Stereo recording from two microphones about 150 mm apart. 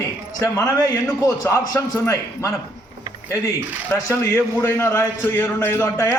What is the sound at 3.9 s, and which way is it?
A man's voice, 20° left (ahead or behind).